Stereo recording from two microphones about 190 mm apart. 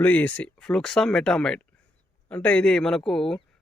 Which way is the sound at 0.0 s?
10° left (ahead or behind).